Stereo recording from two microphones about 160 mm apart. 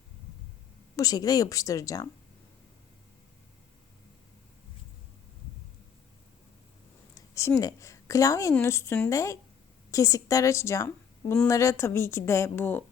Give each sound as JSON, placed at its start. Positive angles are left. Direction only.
{"t": 0.9, "sound": "a woman's voice", "side_deg": 20}
{"t": 7.3, "sound": "a woman's voice", "side_deg": 20}